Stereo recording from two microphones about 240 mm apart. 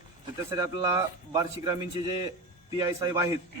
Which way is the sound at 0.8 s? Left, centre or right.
Centre.